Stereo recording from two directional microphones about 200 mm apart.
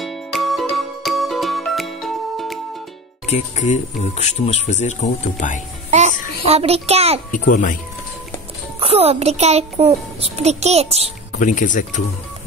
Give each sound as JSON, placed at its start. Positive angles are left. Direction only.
{"t": 0.0, "sound": "music", "side_deg": 0}
{"t": 3.3, "sound": "speech", "side_deg": 35}
{"t": 5.9, "sound": "music", "side_deg": -35}
{"t": 7.2, "sound": "speech", "side_deg": 40}
{"t": 8.7, "sound": "a child's voice", "side_deg": -30}
{"t": 11.3, "sound": "speech", "side_deg": 40}